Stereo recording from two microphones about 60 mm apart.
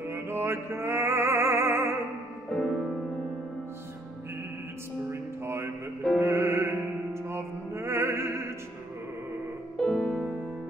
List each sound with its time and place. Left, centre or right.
0.0 s music: right
2.5 s music: centre
5.1 s music: right
9.8 s music: centre